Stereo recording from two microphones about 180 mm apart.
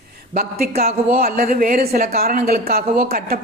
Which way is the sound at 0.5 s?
60° right (ahead or behind).